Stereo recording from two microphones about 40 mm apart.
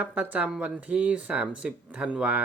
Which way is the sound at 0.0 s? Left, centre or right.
Right.